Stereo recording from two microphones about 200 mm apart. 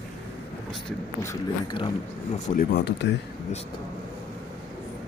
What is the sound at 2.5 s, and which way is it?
Speech, 50° left (ahead or behind).